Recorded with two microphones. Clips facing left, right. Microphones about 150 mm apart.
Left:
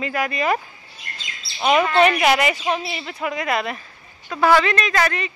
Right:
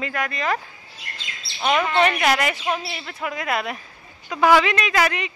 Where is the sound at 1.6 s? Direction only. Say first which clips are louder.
Left 3 dB; 10° left (ahead or behind); by 5.3 s 10° right (ahead or behind).